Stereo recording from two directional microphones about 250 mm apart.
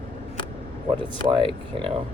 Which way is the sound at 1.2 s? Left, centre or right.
Centre.